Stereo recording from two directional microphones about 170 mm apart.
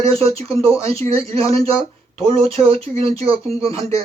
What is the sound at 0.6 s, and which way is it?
Speech, 35° right (ahead or behind).